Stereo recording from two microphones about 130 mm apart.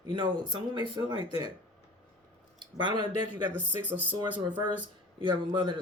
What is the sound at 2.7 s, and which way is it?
Speech, 35° right (ahead or behind).